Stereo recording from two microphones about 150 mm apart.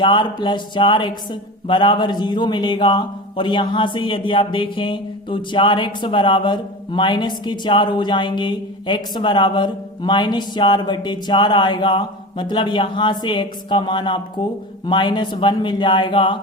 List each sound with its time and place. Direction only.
0.0 s speech: 30° left (ahead or behind)